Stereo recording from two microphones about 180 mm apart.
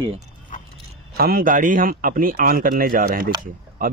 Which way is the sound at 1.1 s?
55° right (ahead or behind).